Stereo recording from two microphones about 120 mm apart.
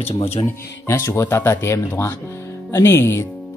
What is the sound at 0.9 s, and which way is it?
Speech, 25° left (ahead or behind).